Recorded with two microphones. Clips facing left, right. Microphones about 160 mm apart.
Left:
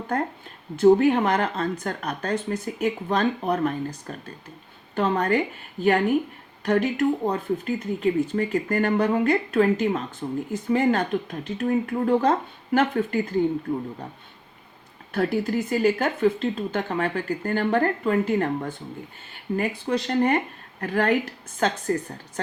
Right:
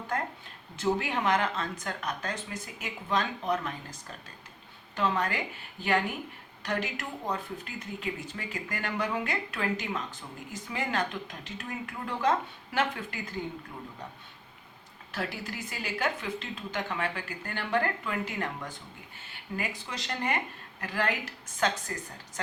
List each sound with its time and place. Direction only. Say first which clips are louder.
0.8 s speech: left 13 dB; 50° left (ahead or behind)
11.9 s speech: left 5 dB; 45° left (ahead or behind)
15.1 s speech: left 13 dB; 50° left (ahead or behind)